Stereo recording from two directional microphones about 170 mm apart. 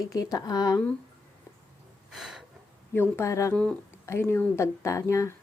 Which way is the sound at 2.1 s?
Centre (ahead or behind).